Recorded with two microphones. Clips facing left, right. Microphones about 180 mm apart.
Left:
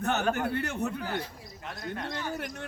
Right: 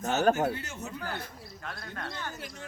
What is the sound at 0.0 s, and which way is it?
Speech, 60° left (ahead or behind).